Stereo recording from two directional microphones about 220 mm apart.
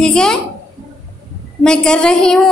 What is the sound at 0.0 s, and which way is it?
Speech, 5° left (ahead or behind).